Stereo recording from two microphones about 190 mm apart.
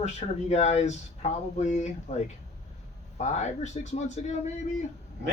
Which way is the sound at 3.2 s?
35° left (ahead or behind).